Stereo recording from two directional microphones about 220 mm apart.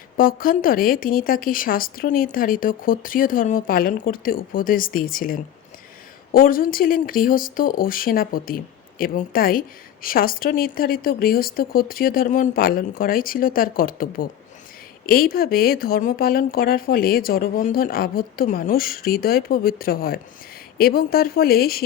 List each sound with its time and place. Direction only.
0.2 s a woman's voice: 40° left (ahead or behind)